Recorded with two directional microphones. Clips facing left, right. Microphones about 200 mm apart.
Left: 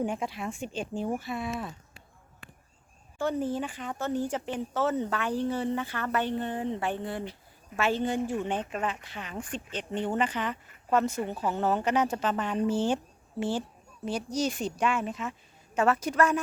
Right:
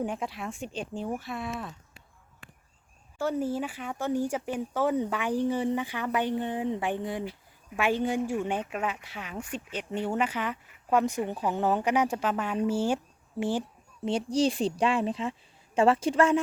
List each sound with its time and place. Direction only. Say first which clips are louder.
0.0 s speech: left 1 dB; centre (ahead or behind)
3.2 s speech: even; 10° right (ahead or behind)
14.1 s a woman's voice: right 4 dB; 30° right (ahead or behind)